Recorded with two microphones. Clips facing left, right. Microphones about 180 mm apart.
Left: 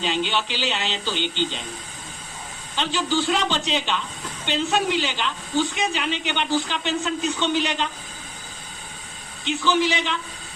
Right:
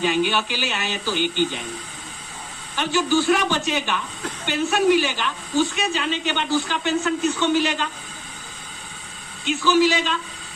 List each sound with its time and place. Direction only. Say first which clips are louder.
0.0 s a woman's voice: right 4 dB; 20° left (ahead or behind)
2.9 s a woman's voice: right 4 dB; 20° left (ahead or behind)
9.4 s a woman's voice: right 4 dB; 20° left (ahead or behind)